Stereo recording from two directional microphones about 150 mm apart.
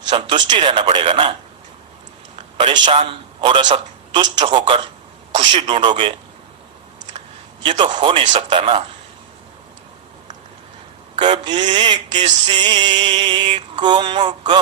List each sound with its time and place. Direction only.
0.1 s music: 35° right (ahead or behind)
2.6 s music: 30° right (ahead or behind)
3.0 s a man's voice: 35° right (ahead or behind)
4.5 s music: 35° right (ahead or behind)
7.6 s a man's voice: 35° right (ahead or behind)
7.9 s music: 35° right (ahead or behind)
8.2 s speech: 55° right (ahead or behind)
8.4 s music: 35° right (ahead or behind)
11.2 s music: 30° right (ahead or behind)